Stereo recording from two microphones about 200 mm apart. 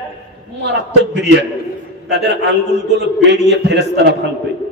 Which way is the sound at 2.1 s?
55° right (ahead or behind).